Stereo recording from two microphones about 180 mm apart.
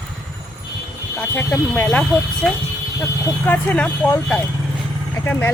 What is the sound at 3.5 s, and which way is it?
Speech, 10° left (ahead or behind).